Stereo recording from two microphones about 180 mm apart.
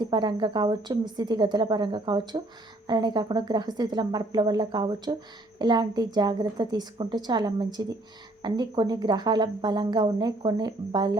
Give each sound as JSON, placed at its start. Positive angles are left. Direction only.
{"t": 0.0, "sound": "speech", "side_deg": -25}